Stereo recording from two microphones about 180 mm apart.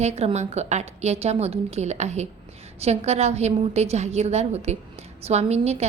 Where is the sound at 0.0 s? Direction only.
35° right (ahead or behind).